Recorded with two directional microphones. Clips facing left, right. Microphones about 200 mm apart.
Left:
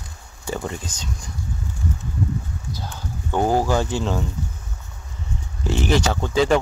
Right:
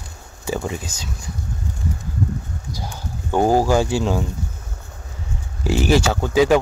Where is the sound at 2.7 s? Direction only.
10° right (ahead or behind).